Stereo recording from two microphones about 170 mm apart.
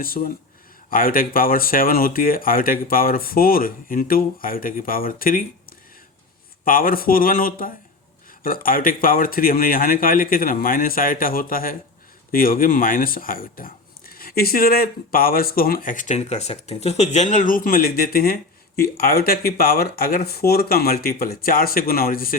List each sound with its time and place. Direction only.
0.0 s speech: 55° left (ahead or behind)